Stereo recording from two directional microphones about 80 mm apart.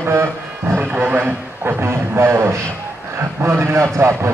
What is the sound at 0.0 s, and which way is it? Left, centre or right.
Speech, right.